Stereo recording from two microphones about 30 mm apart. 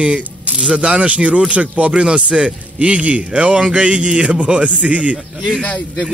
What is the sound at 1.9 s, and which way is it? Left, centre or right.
A man's voice, right.